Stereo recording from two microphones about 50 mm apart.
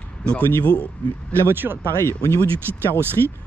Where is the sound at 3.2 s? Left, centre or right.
Left.